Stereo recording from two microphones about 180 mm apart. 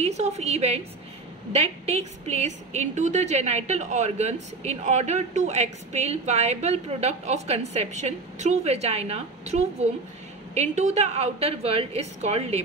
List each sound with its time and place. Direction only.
0.0 s a woman's voice: 40° right (ahead or behind)